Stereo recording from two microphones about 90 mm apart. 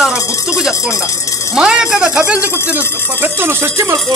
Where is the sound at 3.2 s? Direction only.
25° right (ahead or behind).